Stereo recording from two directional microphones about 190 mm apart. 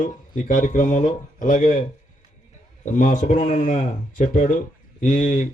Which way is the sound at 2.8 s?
40° left (ahead or behind).